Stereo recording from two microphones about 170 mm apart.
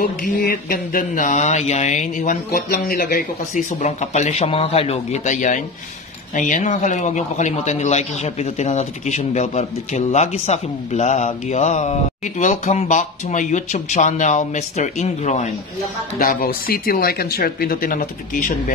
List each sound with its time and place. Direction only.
0.0 s speech: 60° left (ahead or behind); by 15.4 s 45° left (ahead or behind)
16.2 s speech: 55° left (ahead or behind)